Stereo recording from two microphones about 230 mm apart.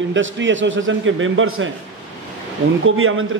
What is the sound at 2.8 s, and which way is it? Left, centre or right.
Speech, right.